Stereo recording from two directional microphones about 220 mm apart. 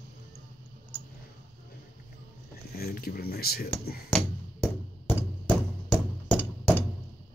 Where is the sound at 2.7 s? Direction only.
40° left (ahead or behind).